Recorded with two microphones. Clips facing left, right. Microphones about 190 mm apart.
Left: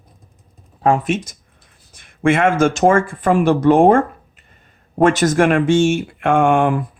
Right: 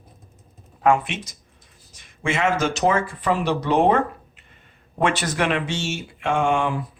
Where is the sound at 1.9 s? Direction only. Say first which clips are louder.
Left 10 dB; 55° left (ahead or behind).